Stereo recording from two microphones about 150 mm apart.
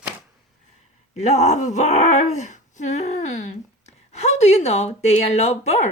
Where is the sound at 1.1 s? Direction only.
50° left (ahead or behind).